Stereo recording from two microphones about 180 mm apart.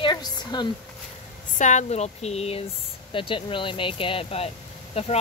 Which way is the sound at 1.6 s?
40° left (ahead or behind).